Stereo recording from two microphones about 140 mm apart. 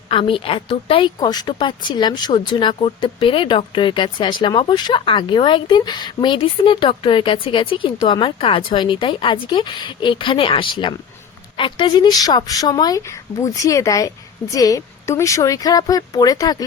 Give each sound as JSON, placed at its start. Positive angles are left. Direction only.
{"t": 0.1, "sound": "speech", "side_deg": 40}
{"t": 1.2, "sound": "speech", "side_deg": 30}